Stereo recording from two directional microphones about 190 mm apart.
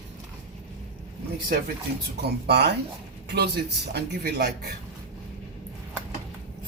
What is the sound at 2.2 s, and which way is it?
Speech, 60° right (ahead or behind).